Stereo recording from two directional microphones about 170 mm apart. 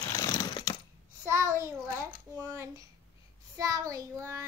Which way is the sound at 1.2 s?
15° right (ahead or behind).